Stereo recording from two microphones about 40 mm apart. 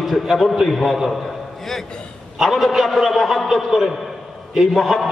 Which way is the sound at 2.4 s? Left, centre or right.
Centre.